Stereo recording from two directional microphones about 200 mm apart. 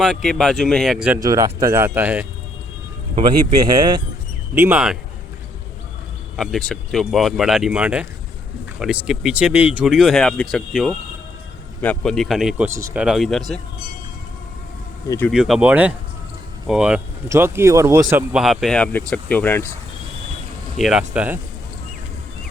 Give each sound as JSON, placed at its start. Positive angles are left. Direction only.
{"t": 0.0, "sound": "speech", "side_deg": 0}
{"t": 1.2, "sound": "speech", "side_deg": -20}
{"t": 4.5, "sound": "speech", "side_deg": -10}
{"t": 6.3, "sound": "speech", "side_deg": 0}
{"t": 15.0, "sound": "speech", "side_deg": 15}
{"t": 15.3, "sound": "speech", "side_deg": 0}
{"t": 20.7, "sound": "speech", "side_deg": 0}